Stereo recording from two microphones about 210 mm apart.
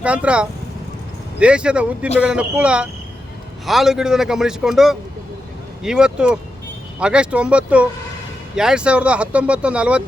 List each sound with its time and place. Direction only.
0.0 s speech: 5° right (ahead or behind)